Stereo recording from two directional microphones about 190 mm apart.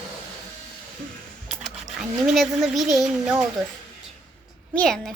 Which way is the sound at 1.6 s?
Centre (ahead or behind).